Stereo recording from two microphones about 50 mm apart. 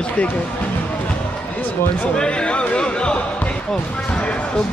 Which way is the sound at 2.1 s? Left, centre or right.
Centre.